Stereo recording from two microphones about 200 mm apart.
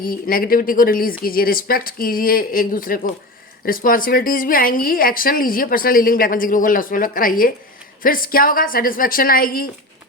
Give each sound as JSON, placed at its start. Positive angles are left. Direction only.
{"t": 0.0, "sound": "speech", "side_deg": 45}